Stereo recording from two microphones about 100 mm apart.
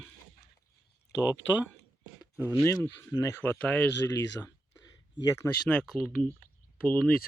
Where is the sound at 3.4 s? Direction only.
15° left (ahead or behind).